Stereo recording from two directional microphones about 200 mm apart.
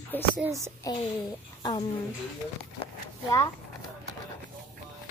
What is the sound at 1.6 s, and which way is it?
Speech, 20° left (ahead or behind).